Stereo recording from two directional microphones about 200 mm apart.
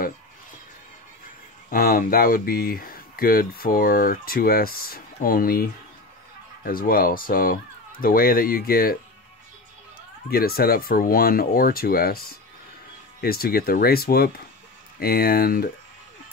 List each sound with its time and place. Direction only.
1.7 s speech: 45° left (ahead or behind)
10.3 s speech: 50° left (ahead or behind)
13.2 s speech: 50° left (ahead or behind)